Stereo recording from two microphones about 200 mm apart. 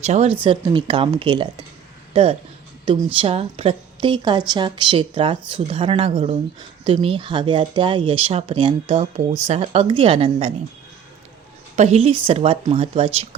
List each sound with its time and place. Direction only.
0.0 s a woman's voice: 35° right (ahead or behind)
2.8 s a woman's voice: 25° right (ahead or behind)
11.8 s a woman's voice: 30° right (ahead or behind)